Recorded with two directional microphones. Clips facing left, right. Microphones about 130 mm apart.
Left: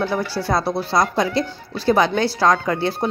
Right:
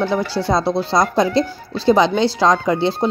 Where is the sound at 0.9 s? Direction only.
25° right (ahead or behind).